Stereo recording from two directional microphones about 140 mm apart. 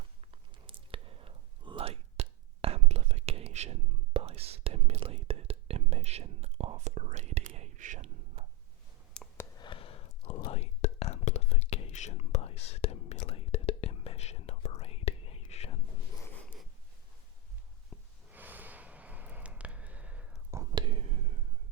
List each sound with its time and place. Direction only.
0.7 s whispering: 40° right (ahead or behind); by 8.0 s 60° right (ahead or behind)
9.2 s clicking: 5° left (ahead or behind)
9.6 s a sound: 35° left (ahead or behind)
10.2 s whispering: 55° left (ahead or behind)
18.3 s snort: 10° right (ahead or behind)
20.7 s whispering: 35° right (ahead or behind)